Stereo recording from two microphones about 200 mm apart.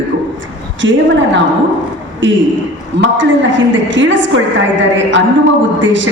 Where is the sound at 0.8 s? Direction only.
65° right (ahead or behind).